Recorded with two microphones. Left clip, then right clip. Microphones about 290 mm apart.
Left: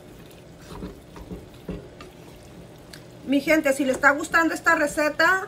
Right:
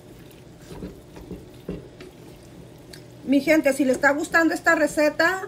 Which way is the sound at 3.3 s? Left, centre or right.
Centre.